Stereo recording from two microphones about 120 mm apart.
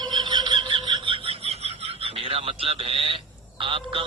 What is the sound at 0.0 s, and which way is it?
Frog, 40° right (ahead or behind).